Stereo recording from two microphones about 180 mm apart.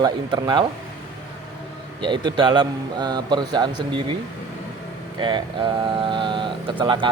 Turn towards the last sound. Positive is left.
turn(degrees=-25)  # may be behind; listen again after turning